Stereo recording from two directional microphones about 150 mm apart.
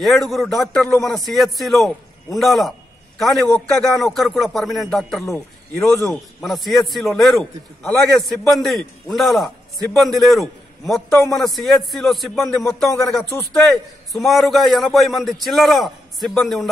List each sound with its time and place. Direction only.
0.0 s a man's voice: centre (ahead or behind)
5.2 s a man's voice: 20° left (ahead or behind)
6.4 s a man's voice: centre (ahead or behind)